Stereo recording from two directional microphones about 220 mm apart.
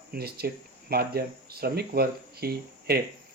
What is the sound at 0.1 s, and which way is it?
Speech, 45° right (ahead or behind).